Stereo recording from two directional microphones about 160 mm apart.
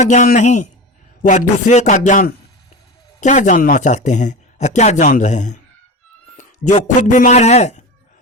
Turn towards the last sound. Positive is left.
turn(degrees=45)  # may be behind; listen again after turning